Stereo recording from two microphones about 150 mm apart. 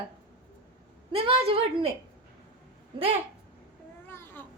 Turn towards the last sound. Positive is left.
turn(degrees=15)  # may be behind; listen again after turning